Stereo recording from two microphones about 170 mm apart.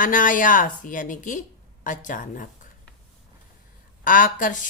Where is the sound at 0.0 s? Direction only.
50° left (ahead or behind).